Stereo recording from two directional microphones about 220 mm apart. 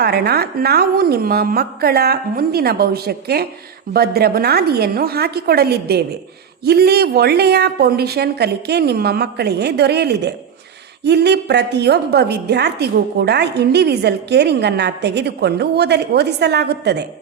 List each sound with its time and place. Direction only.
0.0 s a woman's voice: 45° right (ahead or behind)